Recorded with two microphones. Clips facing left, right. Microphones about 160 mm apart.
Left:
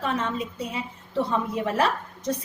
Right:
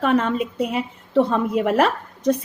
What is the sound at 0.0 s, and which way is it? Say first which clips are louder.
A woman's voice: right 8 dB; 65° right (ahead or behind).